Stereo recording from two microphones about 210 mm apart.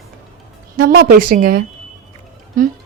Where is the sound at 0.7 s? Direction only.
50° right (ahead or behind).